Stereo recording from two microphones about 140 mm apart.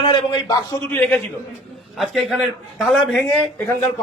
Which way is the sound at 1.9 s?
Centre (ahead or behind).